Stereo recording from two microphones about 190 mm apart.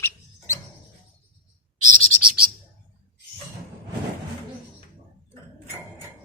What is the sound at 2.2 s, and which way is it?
Bird, 5° right (ahead or behind).